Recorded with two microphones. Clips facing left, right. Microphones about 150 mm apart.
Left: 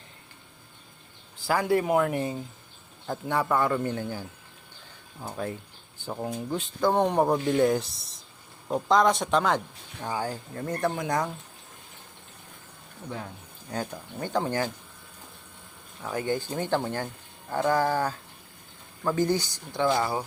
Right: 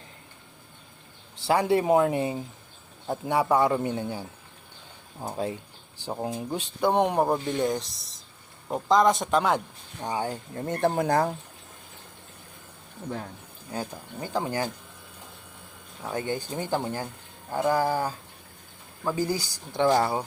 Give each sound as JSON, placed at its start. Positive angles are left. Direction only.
{"t": 1.5, "sound": "speech", "side_deg": -25}
{"t": 5.3, "sound": "speech", "side_deg": -20}
{"t": 7.2, "sound": "speech", "side_deg": 0}
{"t": 10.0, "sound": "speech", "side_deg": -20}
{"t": 13.7, "sound": "speech", "side_deg": -10}
{"t": 16.0, "sound": "speech", "side_deg": -25}
{"t": 19.7, "sound": "speech", "side_deg": -35}